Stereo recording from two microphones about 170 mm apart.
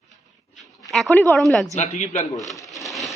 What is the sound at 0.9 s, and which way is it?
Speech, 5° left (ahead or behind).